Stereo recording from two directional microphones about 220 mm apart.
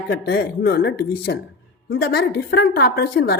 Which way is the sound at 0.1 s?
45° left (ahead or behind).